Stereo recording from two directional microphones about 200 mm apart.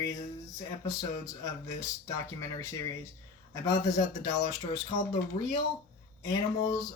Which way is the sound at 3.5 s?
20° left (ahead or behind).